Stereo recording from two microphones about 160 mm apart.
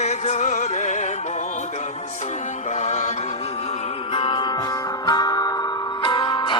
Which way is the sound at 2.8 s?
45° left (ahead or behind).